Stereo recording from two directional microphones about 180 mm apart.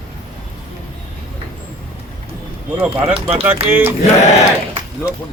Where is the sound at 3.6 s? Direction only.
10° right (ahead or behind).